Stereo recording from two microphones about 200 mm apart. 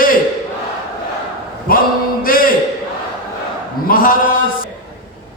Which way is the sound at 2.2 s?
45° left (ahead or behind).